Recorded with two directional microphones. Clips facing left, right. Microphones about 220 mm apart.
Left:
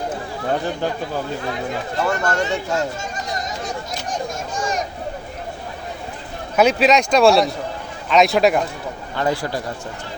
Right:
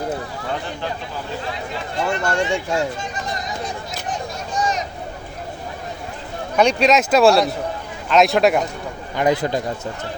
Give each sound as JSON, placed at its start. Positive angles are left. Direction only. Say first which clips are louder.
{"t": 2.2, "sound": "speech", "louder": "even", "side_deg": -10}
{"t": 3.0, "sound": "a sound", "louder": "even", "side_deg": 45}
{"t": 6.6, "sound": "speech", "louder": "left 1 dB", "side_deg": 5}
{"t": 9.1, "sound": "speech", "louder": "right 3 dB", "side_deg": -20}